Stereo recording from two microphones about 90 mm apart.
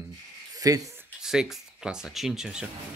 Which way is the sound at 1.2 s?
5° right (ahead or behind).